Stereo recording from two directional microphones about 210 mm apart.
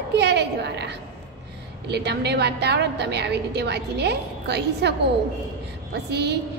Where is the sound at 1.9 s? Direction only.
50° right (ahead or behind).